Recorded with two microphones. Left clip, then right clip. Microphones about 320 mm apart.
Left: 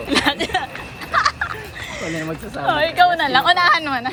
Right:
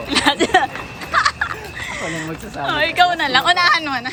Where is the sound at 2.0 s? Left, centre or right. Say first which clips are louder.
Left 3 dB; centre.